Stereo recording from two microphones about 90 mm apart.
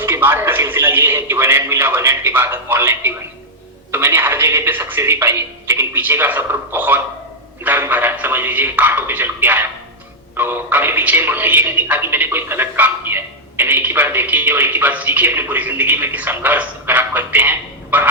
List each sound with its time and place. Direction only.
0.0 s a man's voice: 25° right (ahead or behind)